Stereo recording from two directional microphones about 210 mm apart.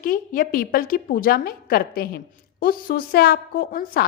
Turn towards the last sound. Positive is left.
turn(degrees=45)  # may be behind; listen again after turning